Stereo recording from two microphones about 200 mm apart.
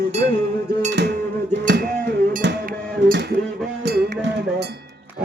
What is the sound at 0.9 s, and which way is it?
Cowbell, 60° right (ahead or behind).